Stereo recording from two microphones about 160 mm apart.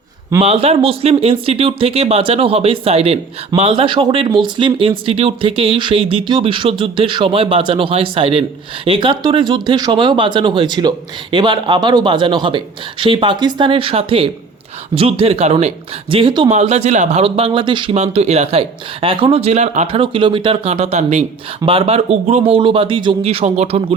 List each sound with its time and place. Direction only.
0.4 s speech: 40° right (ahead or behind)
16.6 s speech: 45° right (ahead or behind)